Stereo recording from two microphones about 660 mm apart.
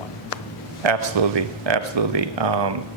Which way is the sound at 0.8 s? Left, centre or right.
Right.